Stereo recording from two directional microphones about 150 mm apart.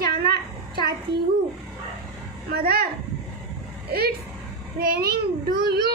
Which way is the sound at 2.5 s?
90° right.